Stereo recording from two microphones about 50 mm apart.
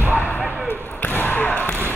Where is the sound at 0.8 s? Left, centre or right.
Left.